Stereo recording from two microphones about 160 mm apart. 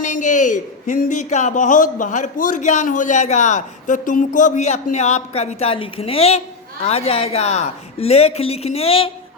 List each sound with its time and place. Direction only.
0.0 s a man's voice: 50° left (ahead or behind); by 9.1 s 35° left (ahead or behind)